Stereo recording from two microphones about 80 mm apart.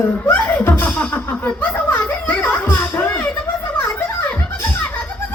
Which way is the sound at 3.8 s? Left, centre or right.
Left.